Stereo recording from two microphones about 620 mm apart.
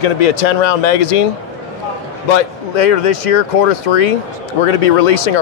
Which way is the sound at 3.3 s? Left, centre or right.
Left.